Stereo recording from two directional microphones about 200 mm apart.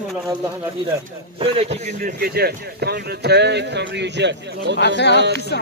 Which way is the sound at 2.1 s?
50° right (ahead or behind).